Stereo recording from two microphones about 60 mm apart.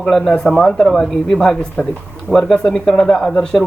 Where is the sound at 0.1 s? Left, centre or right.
Centre.